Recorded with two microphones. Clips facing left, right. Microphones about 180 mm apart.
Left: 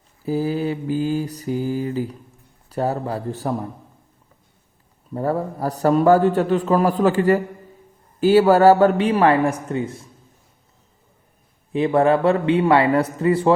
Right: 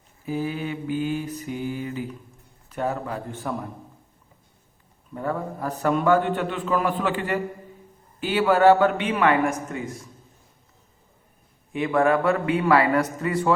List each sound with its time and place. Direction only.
0.3 s a man's voice: 35° left (ahead or behind)
5.1 s a man's voice: 35° left (ahead or behind)
11.7 s a man's voice: 30° left (ahead or behind)